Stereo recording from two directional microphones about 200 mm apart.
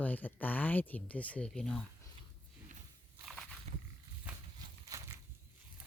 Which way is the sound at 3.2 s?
Centre (ahead or behind).